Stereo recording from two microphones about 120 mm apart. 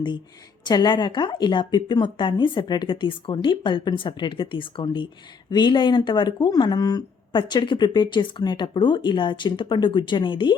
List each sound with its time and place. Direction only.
0.6 s speech: 35° left (ahead or behind)